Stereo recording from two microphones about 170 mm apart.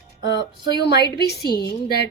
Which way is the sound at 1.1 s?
75° left (ahead or behind).